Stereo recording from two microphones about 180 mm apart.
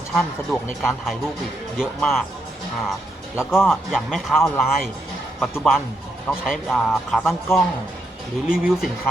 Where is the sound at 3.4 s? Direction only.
5° right (ahead or behind).